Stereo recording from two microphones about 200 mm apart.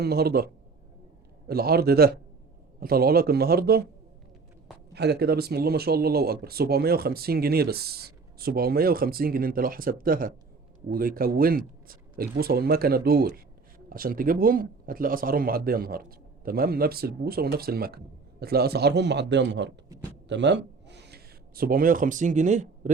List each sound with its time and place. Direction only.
0.0 s speech: 50° right (ahead or behind)
4.9 s a man's voice: 55° right (ahead or behind); by 22.9 s 40° right (ahead or behind)